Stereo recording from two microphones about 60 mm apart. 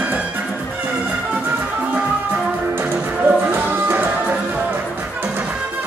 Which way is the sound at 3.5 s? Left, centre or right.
Right.